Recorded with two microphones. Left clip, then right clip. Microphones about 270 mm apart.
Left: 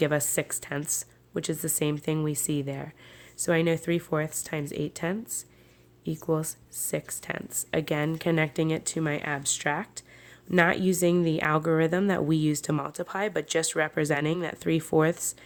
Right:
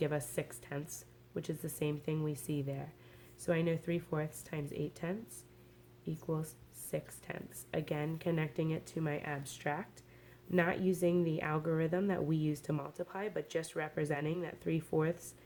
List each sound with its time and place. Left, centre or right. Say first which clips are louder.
0.0 s speech: left 10 dB; left